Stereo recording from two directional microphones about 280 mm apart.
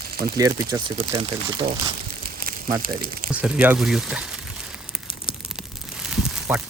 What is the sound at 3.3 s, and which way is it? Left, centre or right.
Speech, centre.